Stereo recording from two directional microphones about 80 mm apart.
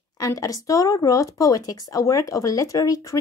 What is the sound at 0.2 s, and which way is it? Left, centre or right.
Speech, left.